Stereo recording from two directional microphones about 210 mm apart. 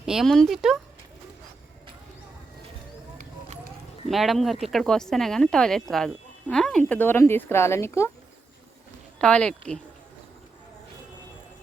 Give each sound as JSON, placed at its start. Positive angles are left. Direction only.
{"t": 0.0, "sound": "speech", "side_deg": 0}
{"t": 3.2, "sound": "a sound", "side_deg": -40}
{"t": 4.1, "sound": "speech", "side_deg": 0}
{"t": 9.2, "sound": "speech", "side_deg": 5}